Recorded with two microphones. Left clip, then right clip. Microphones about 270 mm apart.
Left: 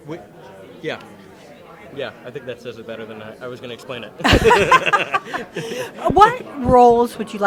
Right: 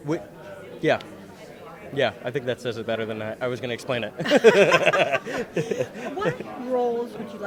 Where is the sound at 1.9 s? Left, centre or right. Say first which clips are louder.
Right 5 dB; right.